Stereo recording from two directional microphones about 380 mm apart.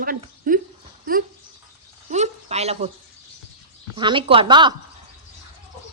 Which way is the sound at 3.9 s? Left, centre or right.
Centre.